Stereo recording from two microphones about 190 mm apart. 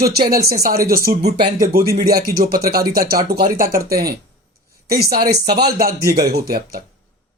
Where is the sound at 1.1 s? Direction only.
35° right (ahead or behind).